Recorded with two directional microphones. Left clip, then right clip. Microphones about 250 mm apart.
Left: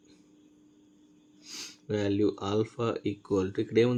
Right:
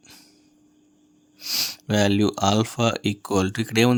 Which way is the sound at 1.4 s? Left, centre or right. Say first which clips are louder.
Right 17 dB; right.